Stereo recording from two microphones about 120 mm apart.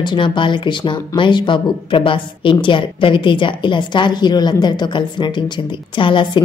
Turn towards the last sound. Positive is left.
turn(degrees=40)  # may be behind; listen again after turning